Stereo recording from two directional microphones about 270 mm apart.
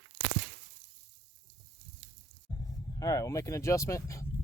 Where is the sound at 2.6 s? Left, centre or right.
Centre.